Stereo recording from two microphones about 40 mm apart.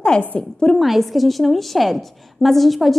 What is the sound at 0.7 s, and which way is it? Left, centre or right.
A woman's voice, centre.